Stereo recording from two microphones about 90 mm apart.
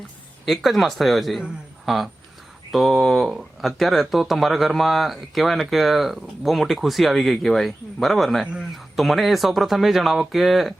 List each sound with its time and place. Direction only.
0.4 s speech: centre (ahead or behind)